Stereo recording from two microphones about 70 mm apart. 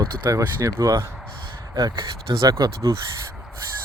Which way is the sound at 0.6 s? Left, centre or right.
Right.